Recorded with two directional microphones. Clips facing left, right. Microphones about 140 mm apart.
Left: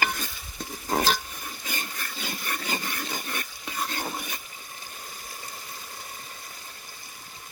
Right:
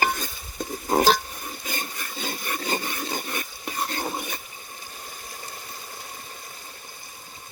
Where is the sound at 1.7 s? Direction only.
25° right (ahead or behind).